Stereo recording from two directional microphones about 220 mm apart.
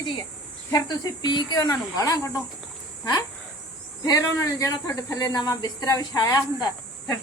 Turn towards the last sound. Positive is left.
turn(degrees=15)  # may be behind; listen again after turning